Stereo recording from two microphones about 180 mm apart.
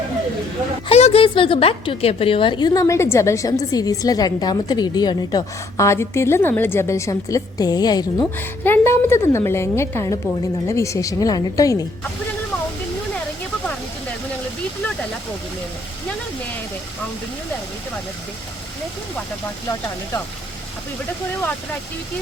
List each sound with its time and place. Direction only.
0.9 s a woman's voice: 35° left (ahead or behind)
8.4 s a woman's voice: 10° left (ahead or behind)